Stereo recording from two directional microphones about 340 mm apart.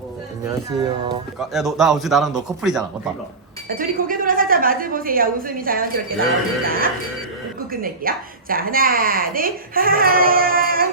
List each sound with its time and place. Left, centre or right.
0.4 s speech: centre
1.4 s a man's voice: centre
3.7 s a woman's voice: right